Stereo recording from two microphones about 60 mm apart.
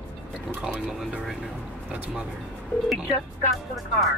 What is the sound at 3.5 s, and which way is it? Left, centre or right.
Speech, centre.